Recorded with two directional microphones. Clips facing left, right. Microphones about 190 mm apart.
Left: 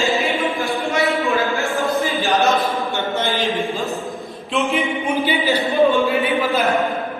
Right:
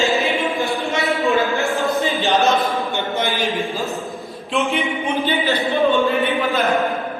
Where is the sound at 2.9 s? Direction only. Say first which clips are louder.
Left 1 dB; 15° right (ahead or behind).